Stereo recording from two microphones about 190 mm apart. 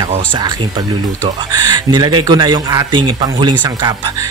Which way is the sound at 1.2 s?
20° right (ahead or behind).